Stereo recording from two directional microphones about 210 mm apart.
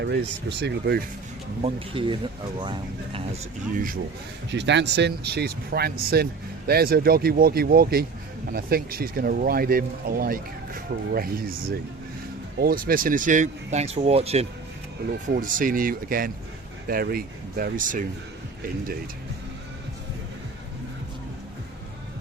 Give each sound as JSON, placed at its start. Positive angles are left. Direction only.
{"t": 0.0, "sound": "speech", "side_deg": -55}
{"t": 1.6, "sound": "speech", "side_deg": -25}
{"t": 4.5, "sound": "speech", "side_deg": -55}
{"t": 12.5, "sound": "speech", "side_deg": -45}
{"t": 15.4, "sound": "speech", "side_deg": -40}